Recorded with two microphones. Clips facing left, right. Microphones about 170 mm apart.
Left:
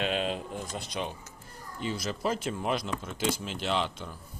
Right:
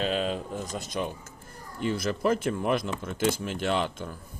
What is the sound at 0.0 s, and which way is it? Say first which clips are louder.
Speech: right 2 dB; 40° right (ahead or behind).